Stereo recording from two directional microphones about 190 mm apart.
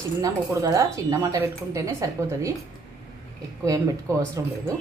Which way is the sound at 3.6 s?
15° right (ahead or behind).